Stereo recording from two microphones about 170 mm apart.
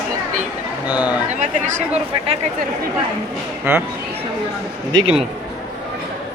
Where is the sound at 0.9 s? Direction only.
10° right (ahead or behind).